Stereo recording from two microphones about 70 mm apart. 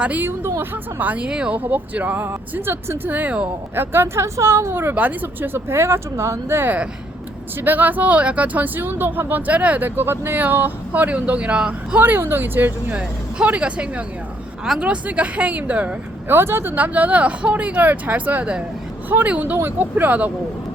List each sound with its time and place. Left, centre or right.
0.0 s speech: right
2.2 s speech: right; by 3.5 s centre
3.8 s speech: right
4.9 s speech: right
12.0 s speech: right
13.0 s speech: centre
16.3 s speech: right